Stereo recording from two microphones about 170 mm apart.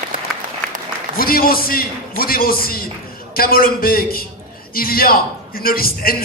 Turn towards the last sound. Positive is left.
turn(degrees=60)  # may be behind; listen again after turning